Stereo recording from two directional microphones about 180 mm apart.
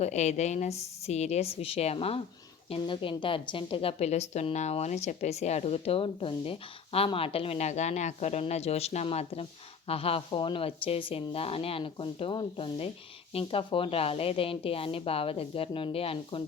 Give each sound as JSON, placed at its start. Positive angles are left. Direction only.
{"t": 0.0, "sound": "a woman's voice", "side_deg": 40}